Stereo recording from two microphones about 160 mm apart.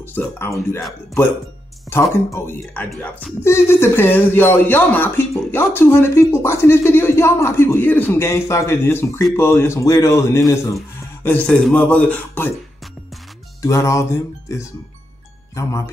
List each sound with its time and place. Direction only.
0.0 s speech: 10° left (ahead or behind)
1.9 s speech: 15° left (ahead or behind)
3.4 s speech: 15° left (ahead or behind)
13.6 s speech: 20° left (ahead or behind)